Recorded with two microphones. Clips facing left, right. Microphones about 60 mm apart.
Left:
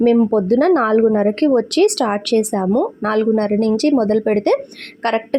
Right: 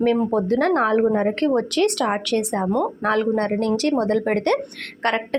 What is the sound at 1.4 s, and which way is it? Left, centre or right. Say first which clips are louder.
Speech: left 8 dB; left.